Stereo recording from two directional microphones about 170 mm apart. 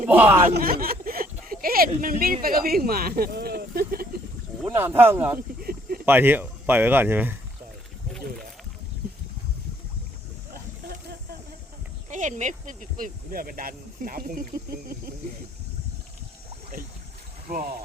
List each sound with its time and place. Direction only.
0.1 s speech: 10° right (ahead or behind)
0.5 s speech: 60° right (ahead or behind)
4.8 s speech: 10° right (ahead or behind)
5.6 s a sound: 60° right (ahead or behind)
6.1 s speech: 10° right (ahead or behind)
12.0 s speech: 45° right (ahead or behind)
17.5 s speech: 55° right (ahead or behind)